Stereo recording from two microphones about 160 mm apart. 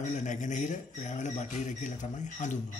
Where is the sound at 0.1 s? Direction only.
50° left (ahead or behind).